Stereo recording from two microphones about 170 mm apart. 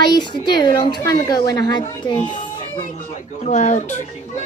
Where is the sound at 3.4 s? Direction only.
45° left (ahead or behind).